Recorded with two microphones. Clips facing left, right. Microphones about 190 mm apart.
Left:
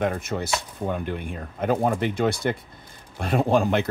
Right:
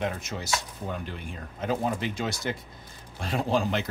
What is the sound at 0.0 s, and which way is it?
Speech, 55° left (ahead or behind).